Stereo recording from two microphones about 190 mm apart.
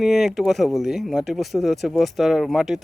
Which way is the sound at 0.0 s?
Centre (ahead or behind).